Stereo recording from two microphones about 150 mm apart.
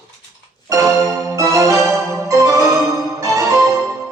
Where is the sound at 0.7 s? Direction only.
20° right (ahead or behind).